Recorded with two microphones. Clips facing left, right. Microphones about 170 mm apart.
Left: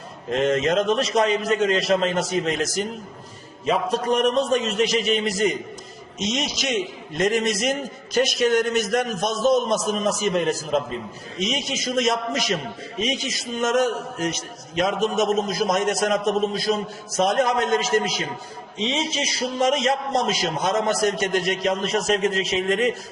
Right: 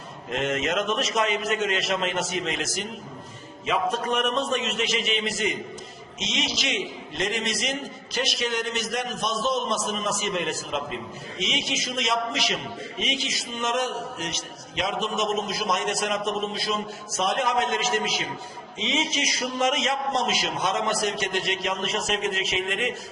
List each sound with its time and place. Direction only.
0.3 s a man's voice: 35° left (ahead or behind)